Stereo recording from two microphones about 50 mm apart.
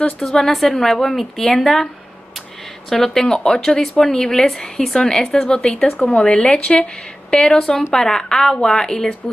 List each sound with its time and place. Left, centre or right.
0.2 s a woman's voice: centre
2.9 s a woman's voice: centre